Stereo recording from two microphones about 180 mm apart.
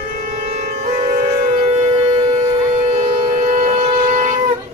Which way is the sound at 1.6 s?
35° right (ahead or behind).